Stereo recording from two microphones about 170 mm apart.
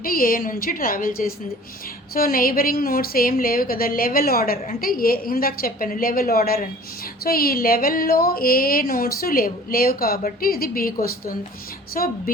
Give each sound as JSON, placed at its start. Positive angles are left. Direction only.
{"t": 0.0, "sound": "a woman's voice", "side_deg": 60}